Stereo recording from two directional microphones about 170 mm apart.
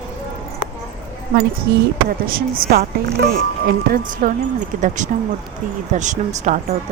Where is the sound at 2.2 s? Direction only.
60° right (ahead or behind).